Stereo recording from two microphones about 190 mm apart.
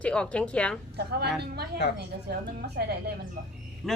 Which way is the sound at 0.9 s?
60° right (ahead or behind).